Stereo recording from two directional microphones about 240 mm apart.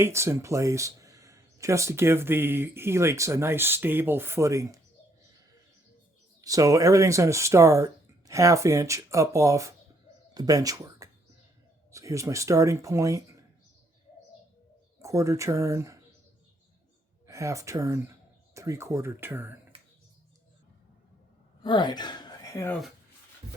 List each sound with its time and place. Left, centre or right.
0.0 s speech: centre
6.4 s speech: centre
15.0 s speech: centre
17.2 s speech: centre
21.6 s speech: centre